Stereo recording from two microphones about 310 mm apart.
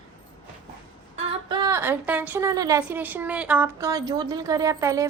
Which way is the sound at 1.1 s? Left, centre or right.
Centre.